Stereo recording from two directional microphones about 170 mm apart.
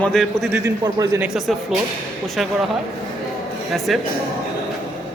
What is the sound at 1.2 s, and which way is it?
A man's voice, 5° right (ahead or behind).